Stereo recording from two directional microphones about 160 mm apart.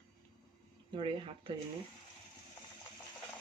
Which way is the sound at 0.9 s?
30° right (ahead or behind).